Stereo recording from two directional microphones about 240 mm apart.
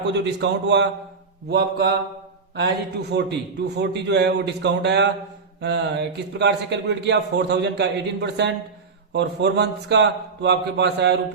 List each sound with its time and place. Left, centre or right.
0.1 s speech: right